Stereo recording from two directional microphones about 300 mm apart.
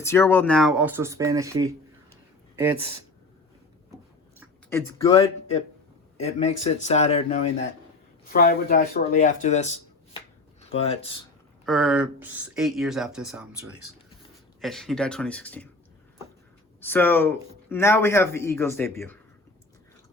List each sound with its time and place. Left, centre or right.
0.0 s speech: centre
5.0 s speech: centre
11.6 s speech: centre
14.6 s speech: centre
16.8 s a man's voice: centre